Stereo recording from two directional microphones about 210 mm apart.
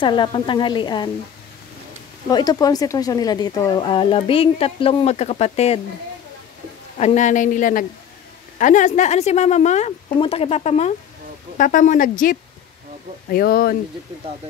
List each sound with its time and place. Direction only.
0.0 s speech: 20° left (ahead or behind)
2.2 s speech: 20° left (ahead or behind)
7.0 s a woman's voice: 35° left (ahead or behind)